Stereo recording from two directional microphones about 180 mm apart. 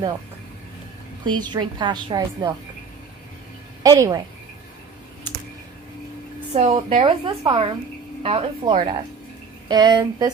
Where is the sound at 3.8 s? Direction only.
20° right (ahead or behind).